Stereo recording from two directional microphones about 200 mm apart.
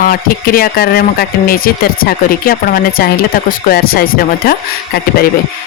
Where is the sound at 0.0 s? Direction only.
45° left (ahead or behind).